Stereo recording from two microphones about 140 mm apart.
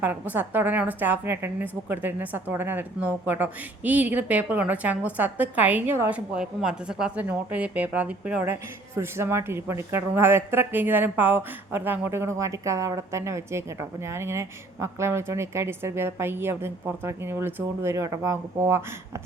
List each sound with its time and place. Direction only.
0.0 s speech: 15° right (ahead or behind)